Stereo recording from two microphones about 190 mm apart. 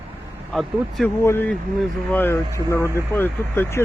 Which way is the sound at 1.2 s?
10° left (ahead or behind).